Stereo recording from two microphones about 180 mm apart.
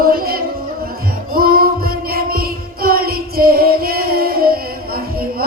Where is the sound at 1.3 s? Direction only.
55° right (ahead or behind).